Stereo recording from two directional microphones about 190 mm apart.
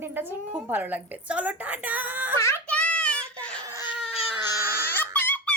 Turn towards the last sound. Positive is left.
turn(degrees=10)  # may be behind; listen again after turning